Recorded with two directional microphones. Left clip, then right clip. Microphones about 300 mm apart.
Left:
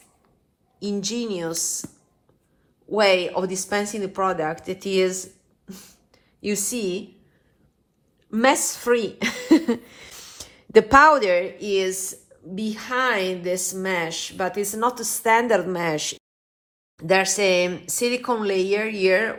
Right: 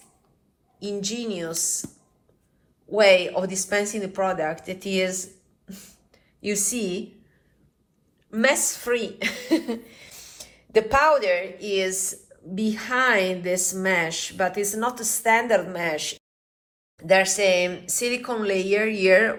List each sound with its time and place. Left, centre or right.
0.8 s a woman's voice: centre
2.9 s speech: centre
8.3 s a woman's voice: centre